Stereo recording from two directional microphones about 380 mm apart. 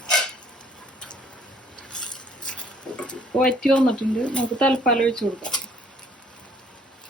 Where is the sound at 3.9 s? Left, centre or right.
Centre.